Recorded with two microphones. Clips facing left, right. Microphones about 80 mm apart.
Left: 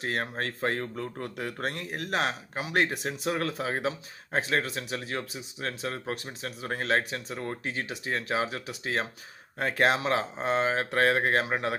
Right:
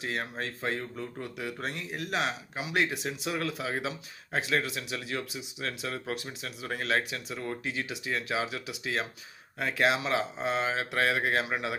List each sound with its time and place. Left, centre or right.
0.0 s speech: left